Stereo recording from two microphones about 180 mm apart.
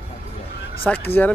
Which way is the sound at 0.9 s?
10° left (ahead or behind).